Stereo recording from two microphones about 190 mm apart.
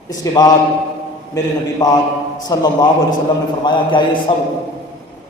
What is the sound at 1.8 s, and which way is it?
A man's voice, 20° left (ahead or behind).